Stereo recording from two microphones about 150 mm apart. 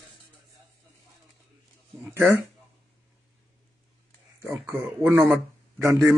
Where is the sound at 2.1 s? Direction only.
15° right (ahead or behind).